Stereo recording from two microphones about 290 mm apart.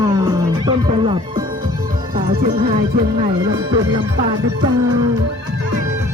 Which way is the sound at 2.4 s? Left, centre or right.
Right.